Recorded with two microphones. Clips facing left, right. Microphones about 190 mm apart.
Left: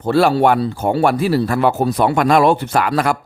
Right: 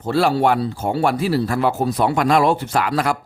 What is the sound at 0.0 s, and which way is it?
Speech, 60° left (ahead or behind).